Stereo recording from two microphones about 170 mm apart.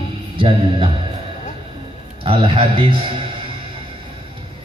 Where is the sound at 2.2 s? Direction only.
30° right (ahead or behind).